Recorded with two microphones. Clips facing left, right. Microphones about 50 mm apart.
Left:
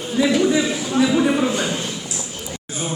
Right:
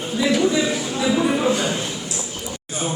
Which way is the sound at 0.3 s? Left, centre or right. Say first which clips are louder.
Left 1 dB; centre.